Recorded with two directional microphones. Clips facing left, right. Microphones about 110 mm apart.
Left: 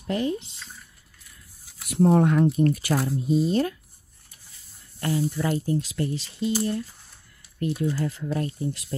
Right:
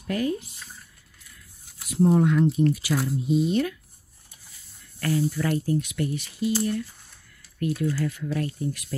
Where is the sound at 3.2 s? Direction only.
40° left (ahead or behind).